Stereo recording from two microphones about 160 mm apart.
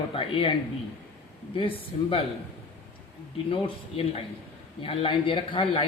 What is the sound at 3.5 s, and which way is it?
Speech, 35° left (ahead or behind).